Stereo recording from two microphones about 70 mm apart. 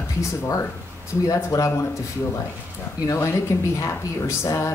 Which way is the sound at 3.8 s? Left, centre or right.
Left.